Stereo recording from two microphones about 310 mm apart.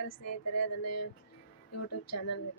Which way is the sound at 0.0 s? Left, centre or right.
Left.